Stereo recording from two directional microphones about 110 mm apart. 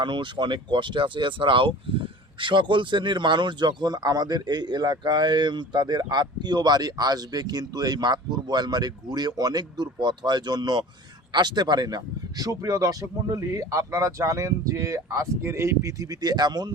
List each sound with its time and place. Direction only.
0.0 s speech: 45° right (ahead or behind)